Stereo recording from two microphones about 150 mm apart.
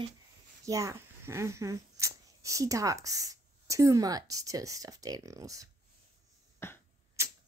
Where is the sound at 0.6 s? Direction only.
20° right (ahead or behind).